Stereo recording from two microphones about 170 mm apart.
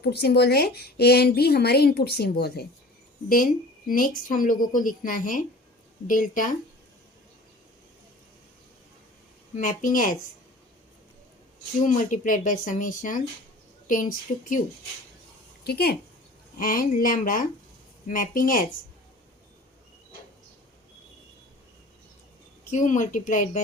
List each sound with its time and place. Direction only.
0.0 s speech: 70° left (ahead or behind)
3.2 s speech: 55° left (ahead or behind)
9.6 s speech: 50° left (ahead or behind)
11.8 s speech: 50° left (ahead or behind)
15.6 s speech: 65° left (ahead or behind)
16.6 s speech: 55° left (ahead or behind)
22.7 s speech: 50° left (ahead or behind)